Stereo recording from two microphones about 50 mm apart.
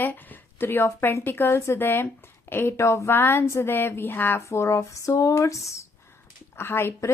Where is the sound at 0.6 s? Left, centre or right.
Left.